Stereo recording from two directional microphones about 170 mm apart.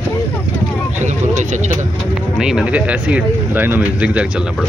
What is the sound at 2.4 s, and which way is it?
Speech, 5° right (ahead or behind).